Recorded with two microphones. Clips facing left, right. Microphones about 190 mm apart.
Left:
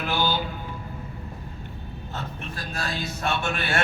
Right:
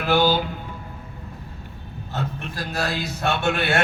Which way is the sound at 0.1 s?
65° right (ahead or behind).